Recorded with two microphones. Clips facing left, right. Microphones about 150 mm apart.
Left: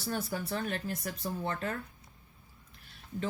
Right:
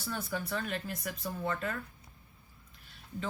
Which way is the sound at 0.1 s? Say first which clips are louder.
Left 2 dB; 40° left (ahead or behind).